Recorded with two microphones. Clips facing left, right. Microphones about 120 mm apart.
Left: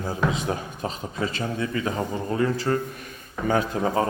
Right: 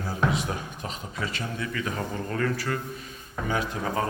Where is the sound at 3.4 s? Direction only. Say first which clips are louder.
Left 6 dB; 35° left (ahead or behind).